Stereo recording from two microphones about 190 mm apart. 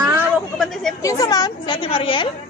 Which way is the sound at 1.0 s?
20° left (ahead or behind).